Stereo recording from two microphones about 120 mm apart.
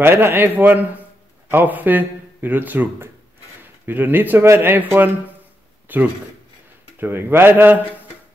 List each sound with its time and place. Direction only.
0.0 s a man's voice: 20° right (ahead or behind)